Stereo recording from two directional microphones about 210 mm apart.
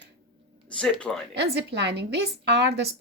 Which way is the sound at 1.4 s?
55° right (ahead or behind).